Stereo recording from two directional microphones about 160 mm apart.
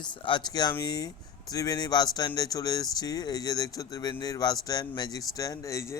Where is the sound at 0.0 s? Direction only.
30° left (ahead or behind).